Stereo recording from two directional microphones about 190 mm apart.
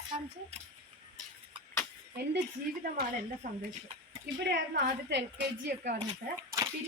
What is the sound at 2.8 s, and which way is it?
Speech, 50° right (ahead or behind).